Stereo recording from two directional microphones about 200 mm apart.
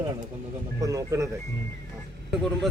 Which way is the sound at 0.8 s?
15° right (ahead or behind).